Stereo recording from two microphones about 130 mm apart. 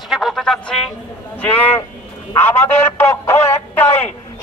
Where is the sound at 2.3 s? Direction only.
15° left (ahead or behind).